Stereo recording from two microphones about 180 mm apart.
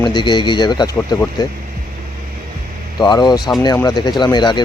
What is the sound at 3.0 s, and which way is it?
Speech, 25° left (ahead or behind).